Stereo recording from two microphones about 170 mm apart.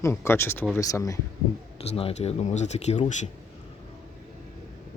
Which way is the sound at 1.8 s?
35° left (ahead or behind).